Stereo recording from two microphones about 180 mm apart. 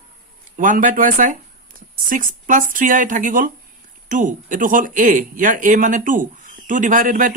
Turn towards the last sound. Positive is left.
turn(degrees=-45)  # may be behind; listen again after turning